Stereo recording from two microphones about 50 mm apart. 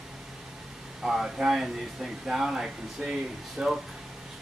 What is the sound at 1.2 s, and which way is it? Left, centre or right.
Speech, centre.